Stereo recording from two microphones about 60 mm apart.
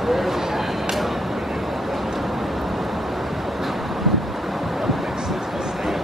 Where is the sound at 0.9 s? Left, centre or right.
Centre.